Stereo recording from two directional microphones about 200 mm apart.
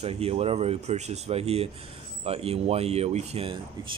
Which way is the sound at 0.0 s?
30° right (ahead or behind).